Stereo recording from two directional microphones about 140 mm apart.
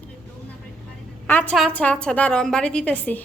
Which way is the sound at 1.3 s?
15° left (ahead or behind).